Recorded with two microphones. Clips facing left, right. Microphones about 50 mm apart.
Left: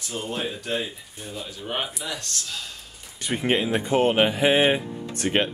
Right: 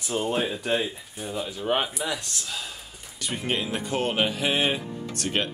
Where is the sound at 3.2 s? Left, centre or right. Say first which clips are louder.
Left 5 dB; left.